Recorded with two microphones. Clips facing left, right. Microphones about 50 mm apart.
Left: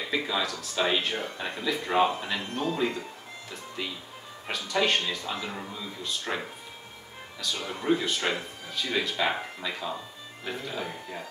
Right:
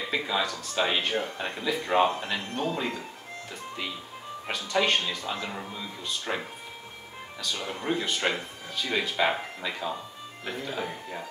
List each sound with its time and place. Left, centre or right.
0.0 s speech: centre
4.5 s speech: centre
7.6 s speech: centre